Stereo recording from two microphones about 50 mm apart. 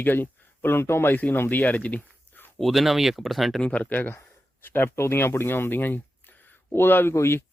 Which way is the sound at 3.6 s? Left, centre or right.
Left.